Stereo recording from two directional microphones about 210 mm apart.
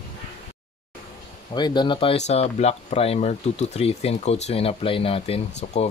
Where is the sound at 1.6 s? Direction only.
20° left (ahead or behind).